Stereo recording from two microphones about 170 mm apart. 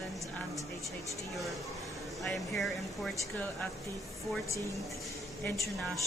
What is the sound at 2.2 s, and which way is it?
Speech, centre (ahead or behind).